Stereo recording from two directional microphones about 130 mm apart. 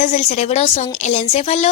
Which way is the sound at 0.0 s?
65° left (ahead or behind).